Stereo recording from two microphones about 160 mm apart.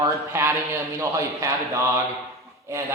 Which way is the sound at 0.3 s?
15° right (ahead or behind).